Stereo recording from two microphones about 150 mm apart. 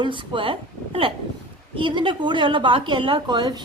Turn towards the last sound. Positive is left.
turn(degrees=-30)  # may be behind; listen again after turning